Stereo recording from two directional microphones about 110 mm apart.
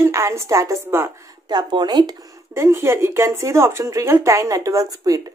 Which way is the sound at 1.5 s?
40° right (ahead or behind).